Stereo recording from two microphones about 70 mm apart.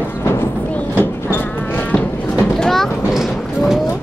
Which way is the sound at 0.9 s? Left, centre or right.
Left.